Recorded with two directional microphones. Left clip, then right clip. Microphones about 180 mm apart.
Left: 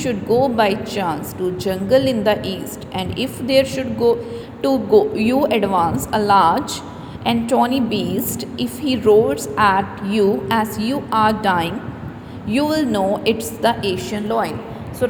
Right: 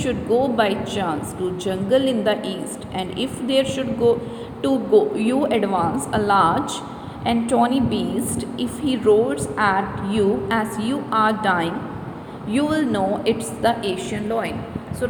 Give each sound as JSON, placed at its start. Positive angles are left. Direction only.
{"t": 0.0, "sound": "a woman's voice", "side_deg": 20}
{"t": 7.8, "sound": "a woman's voice", "side_deg": 70}
{"t": 8.1, "sound": "a woman's voice", "side_deg": 25}